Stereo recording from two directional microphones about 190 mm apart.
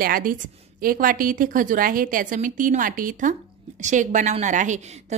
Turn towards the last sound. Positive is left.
turn(degrees=-40)  # may be behind; listen again after turning